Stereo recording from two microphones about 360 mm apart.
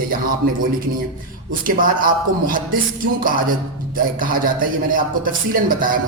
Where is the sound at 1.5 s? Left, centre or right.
Right.